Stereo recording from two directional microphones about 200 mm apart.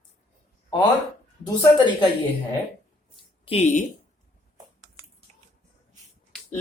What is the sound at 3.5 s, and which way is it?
Speech, 35° left (ahead or behind).